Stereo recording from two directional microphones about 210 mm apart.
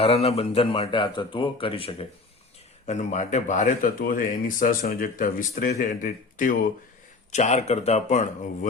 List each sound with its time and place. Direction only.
0.0 s speech: 30° left (ahead or behind)